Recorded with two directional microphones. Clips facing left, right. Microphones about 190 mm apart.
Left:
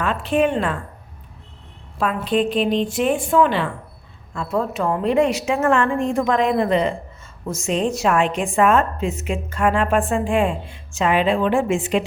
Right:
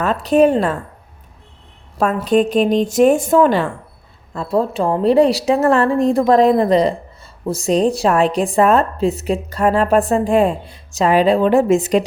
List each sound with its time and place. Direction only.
0.0 s speech: 40° right (ahead or behind)
2.0 s a woman's voice: 45° right (ahead or behind)